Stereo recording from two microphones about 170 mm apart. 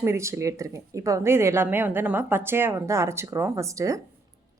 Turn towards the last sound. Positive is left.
turn(degrees=-20)  # may be behind; listen again after turning